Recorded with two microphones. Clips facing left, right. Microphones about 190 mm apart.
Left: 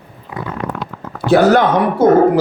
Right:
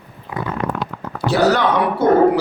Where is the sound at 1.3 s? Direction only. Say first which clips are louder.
Left 5 dB; 50° left (ahead or behind).